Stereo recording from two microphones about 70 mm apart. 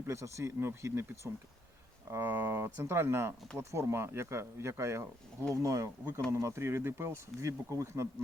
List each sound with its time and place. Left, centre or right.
0.0 s speech: right
2.2 s speech: right